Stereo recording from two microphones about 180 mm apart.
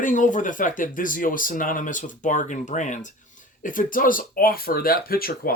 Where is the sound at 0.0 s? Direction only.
45° left (ahead or behind).